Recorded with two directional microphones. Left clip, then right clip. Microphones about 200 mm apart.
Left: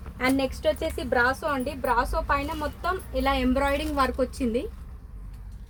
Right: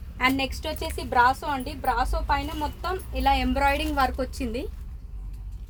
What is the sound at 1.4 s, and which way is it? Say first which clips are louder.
A woman's voice: even; 20° right (ahead or behind).